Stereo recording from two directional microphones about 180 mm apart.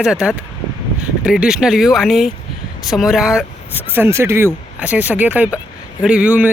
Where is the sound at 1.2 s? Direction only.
5° right (ahead or behind).